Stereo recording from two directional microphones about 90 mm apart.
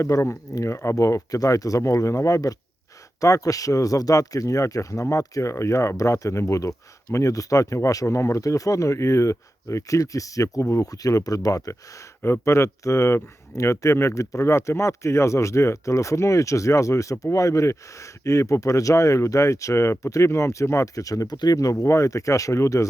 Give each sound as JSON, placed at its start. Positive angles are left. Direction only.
{"t": 0.0, "sound": "speech", "side_deg": 35}